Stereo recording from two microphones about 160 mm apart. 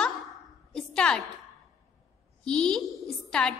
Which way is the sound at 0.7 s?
5° left (ahead or behind).